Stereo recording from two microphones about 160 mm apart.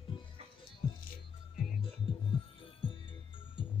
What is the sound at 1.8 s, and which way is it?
Music, 35° left (ahead or behind).